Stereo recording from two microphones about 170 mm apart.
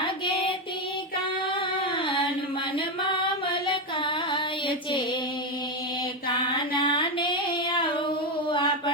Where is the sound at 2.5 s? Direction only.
30° left (ahead or behind).